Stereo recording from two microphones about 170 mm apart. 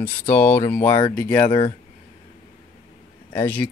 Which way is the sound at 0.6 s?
10° left (ahead or behind).